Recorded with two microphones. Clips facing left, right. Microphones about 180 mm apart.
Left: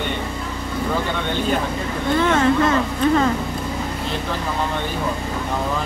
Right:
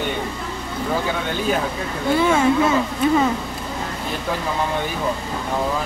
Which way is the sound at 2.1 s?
10° right (ahead or behind).